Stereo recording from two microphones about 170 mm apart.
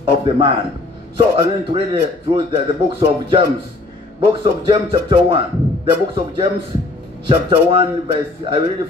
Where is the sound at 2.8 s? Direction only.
30° right (ahead or behind).